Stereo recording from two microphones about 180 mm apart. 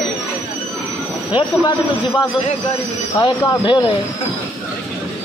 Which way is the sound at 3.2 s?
25° left (ahead or behind).